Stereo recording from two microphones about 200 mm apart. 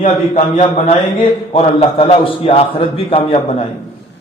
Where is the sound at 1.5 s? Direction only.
30° left (ahead or behind).